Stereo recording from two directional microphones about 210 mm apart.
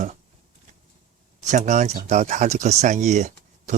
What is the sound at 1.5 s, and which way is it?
Speech, 35° right (ahead or behind).